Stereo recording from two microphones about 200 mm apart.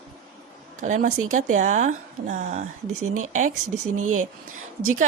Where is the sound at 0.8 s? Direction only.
40° right (ahead or behind).